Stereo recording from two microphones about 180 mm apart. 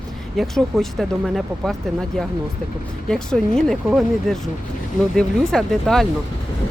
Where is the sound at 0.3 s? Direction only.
Centre (ahead or behind).